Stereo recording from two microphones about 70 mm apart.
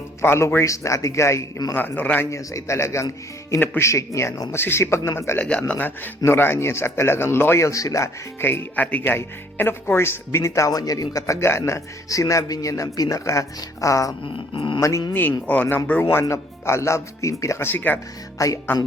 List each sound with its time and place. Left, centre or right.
0.2 s speech: left
1.7 s speech: left
2.3 s speech: left
5.4 s speech: centre; by 8.1 s left
8.4 s speech: left
11.3 s speech: left
15.1 s speech: left
16.2 s speech: left
17.7 s speech: left
18.3 s speech: left